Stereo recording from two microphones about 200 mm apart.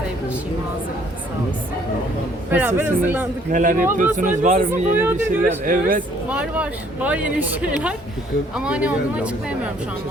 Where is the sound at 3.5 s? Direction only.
40° right (ahead or behind).